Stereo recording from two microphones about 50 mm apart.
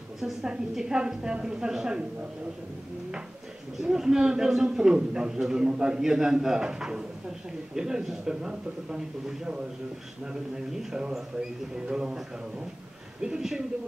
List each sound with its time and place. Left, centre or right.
0.2 s a woman's voice: centre
3.8 s a man's voice: centre